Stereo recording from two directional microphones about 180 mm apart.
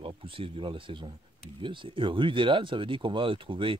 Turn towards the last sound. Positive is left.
turn(degrees=-30)  # may be behind; listen again after turning